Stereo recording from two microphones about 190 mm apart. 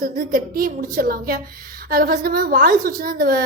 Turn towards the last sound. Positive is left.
turn(degrees=-50)  # may be behind; listen again after turning